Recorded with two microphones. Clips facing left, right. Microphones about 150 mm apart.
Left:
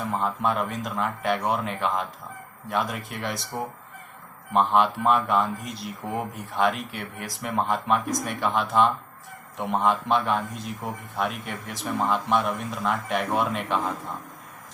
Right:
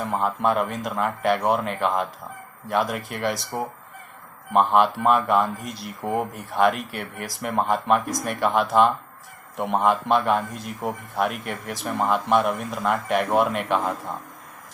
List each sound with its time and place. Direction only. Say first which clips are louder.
0.1 s a man's voice: right 3 dB; 5° right (ahead or behind)
3.5 s speech: right 3 dB; 55° right (ahead or behind)
4.7 s a man's voice: right 2 dB; 5° right (ahead or behind)